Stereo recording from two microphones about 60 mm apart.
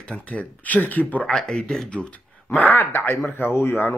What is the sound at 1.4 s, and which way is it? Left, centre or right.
Speech, centre.